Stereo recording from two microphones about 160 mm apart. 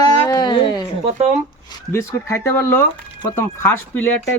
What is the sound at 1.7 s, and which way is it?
A man's voice, 15° left (ahead or behind).